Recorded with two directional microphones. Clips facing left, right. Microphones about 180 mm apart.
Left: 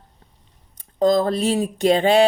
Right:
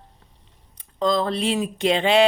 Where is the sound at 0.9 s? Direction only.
45° left (ahead or behind).